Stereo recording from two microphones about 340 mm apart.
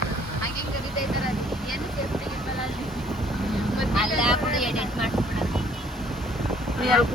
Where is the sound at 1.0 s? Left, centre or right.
Centre.